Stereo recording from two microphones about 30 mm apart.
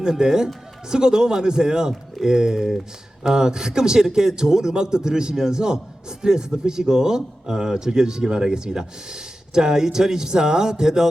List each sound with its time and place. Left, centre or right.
0.0 s a man's voice: centre